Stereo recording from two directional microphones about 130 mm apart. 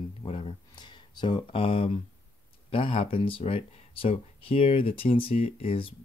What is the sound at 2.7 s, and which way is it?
Speech, 55° left (ahead or behind).